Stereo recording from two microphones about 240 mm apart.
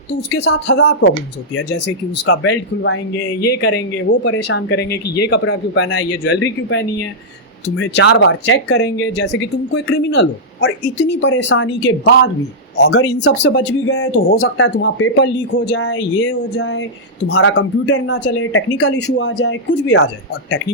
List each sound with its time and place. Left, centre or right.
0.3 s speech: left
2.2 s speech: left
7.8 s speech: left